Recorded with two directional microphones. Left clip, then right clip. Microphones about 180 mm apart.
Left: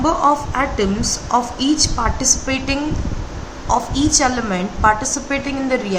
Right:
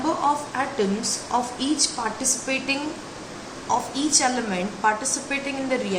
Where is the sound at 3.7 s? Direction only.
60° left (ahead or behind).